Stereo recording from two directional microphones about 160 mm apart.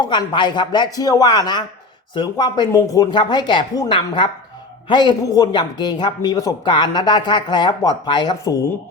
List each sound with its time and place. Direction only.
0.0 s speech: 30° left (ahead or behind)